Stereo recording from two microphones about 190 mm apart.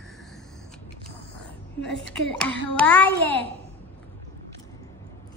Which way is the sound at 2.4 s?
5° left (ahead or behind).